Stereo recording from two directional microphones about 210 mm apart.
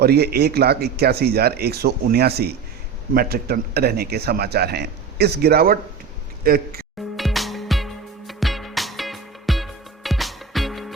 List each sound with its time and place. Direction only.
0.0 s a man's voice: 50° right (ahead or behind)
7.2 s music: centre (ahead or behind)